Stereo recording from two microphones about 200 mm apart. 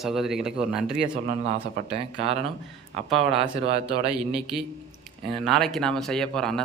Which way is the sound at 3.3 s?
30° right (ahead or behind).